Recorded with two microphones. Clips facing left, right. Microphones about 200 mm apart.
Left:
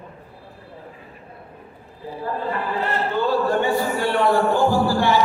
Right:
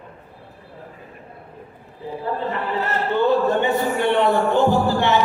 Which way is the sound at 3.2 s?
20° right (ahead or behind).